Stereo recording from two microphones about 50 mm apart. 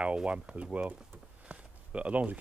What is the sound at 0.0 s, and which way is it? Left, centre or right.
Speech, right.